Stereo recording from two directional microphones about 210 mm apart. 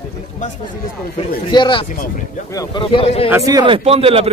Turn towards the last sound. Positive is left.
turn(degrees=-25)  # may be behind; listen again after turning